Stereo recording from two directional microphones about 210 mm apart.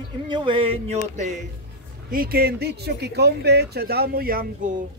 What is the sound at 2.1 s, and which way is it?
Speech, 45° right (ahead or behind).